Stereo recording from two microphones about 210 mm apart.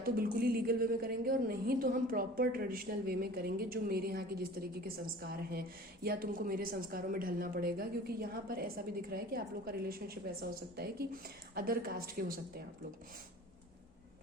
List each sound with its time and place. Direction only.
0.0 s a woman's voice: 45° right (ahead or behind)